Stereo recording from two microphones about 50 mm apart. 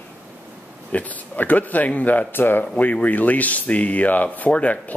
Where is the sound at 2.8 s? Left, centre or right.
Left.